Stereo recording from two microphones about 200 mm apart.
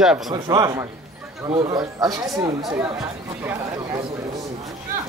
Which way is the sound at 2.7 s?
5° right (ahead or behind).